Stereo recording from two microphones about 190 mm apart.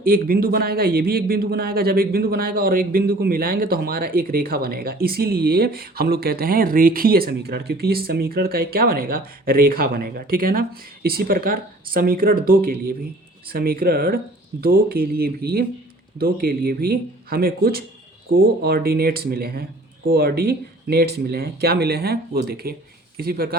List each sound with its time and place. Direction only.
0.0 s a man's voice: 50° right (ahead or behind)